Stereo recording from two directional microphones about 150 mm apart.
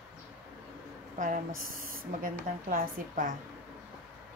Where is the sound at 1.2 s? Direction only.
65° right (ahead or behind).